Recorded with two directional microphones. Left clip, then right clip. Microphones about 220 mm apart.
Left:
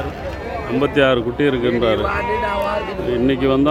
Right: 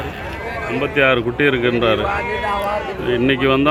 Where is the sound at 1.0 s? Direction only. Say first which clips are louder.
Right 2 dB; 10° left (ahead or behind).